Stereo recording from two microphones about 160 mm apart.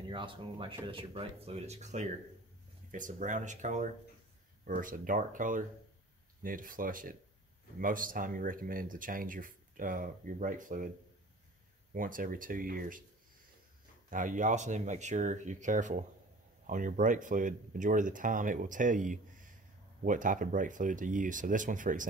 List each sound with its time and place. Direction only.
0.1 s speech: 30° right (ahead or behind); by 10.9 s 55° right (ahead or behind)
11.9 s speech: 60° right (ahead or behind)
14.1 s speech: 55° right (ahead or behind)